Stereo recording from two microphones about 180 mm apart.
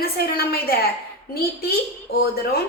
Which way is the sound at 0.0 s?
60° left (ahead or behind).